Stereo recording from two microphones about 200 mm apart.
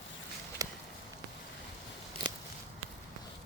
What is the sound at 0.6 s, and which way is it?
Walk, 15° right (ahead or behind).